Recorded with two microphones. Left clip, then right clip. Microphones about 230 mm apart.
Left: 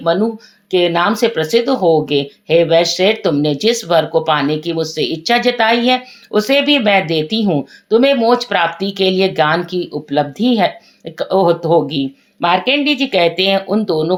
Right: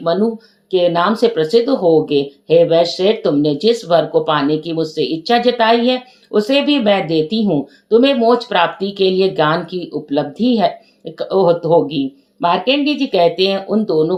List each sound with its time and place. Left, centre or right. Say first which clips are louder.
0.0 s speech: left 1 dB; left